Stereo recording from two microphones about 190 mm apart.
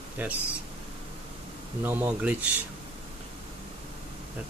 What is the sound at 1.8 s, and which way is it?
Speech, 10° right (ahead or behind).